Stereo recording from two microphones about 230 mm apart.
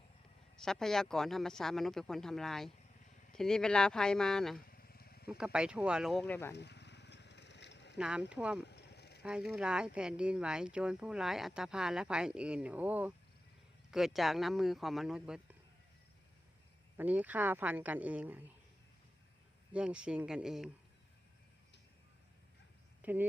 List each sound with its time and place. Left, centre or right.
0.5 s speech: centre
4.7 s vehicle: left
5.4 s speech: centre
6.5 s a sound: left
7.9 s speech: centre
8.6 s a sound: left
9.2 s speech: centre
17.0 s speech: centre
19.7 s speech: centre
23.0 s a sound: centre